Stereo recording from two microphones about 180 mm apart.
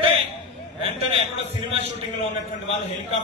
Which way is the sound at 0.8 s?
30° right (ahead or behind).